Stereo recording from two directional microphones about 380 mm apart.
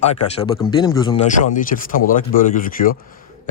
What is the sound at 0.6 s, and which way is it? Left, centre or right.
Speech, centre.